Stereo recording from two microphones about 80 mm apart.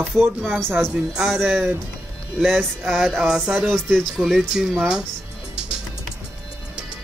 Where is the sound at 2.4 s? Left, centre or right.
Centre.